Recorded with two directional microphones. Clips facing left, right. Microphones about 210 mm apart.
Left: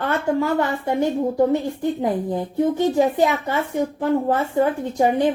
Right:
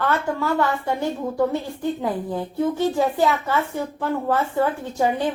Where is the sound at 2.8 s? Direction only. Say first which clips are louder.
Left 3 dB; 20° left (ahead or behind).